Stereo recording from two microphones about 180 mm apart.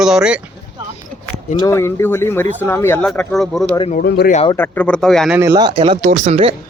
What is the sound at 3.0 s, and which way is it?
Speech, centre (ahead or behind).